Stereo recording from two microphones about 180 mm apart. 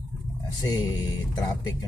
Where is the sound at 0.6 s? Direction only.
20° left (ahead or behind).